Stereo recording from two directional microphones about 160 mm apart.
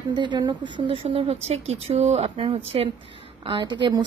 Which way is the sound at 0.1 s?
25° right (ahead or behind).